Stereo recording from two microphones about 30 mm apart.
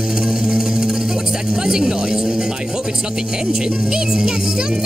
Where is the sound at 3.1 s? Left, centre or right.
Right.